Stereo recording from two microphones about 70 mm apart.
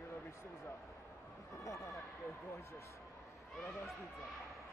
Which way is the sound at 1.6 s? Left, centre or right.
Left.